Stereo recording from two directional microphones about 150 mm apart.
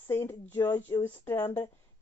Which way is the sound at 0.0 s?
20° left (ahead or behind).